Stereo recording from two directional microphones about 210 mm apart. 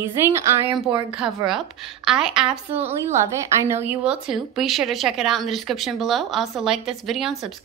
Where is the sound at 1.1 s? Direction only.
5° right (ahead or behind).